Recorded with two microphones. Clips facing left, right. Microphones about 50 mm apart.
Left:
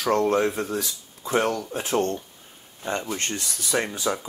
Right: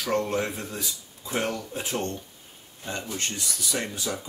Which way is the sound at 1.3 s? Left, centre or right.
Left.